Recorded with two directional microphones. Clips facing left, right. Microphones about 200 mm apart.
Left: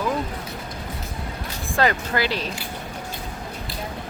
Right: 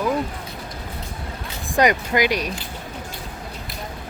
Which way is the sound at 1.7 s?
15° right (ahead or behind).